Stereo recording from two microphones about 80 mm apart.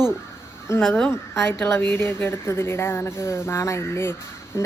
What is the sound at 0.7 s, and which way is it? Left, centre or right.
A woman's voice, left.